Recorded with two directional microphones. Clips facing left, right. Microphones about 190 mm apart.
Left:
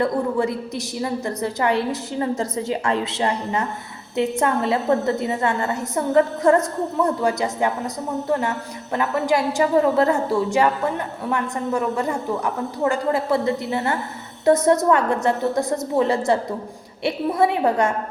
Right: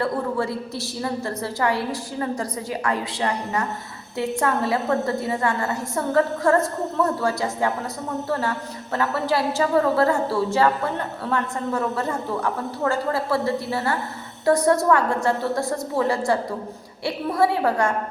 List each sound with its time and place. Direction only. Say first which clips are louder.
0.0 s a woman's voice: left 3 dB; 15° left (ahead or behind)